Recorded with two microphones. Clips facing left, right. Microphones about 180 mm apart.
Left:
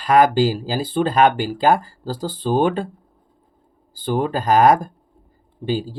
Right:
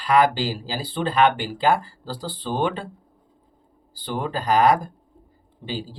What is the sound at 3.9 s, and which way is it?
Speech, 50° left (ahead or behind).